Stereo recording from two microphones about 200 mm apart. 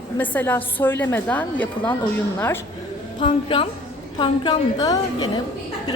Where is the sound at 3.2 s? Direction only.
25° left (ahead or behind).